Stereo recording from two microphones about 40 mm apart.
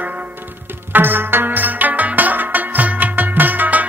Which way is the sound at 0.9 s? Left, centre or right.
Right.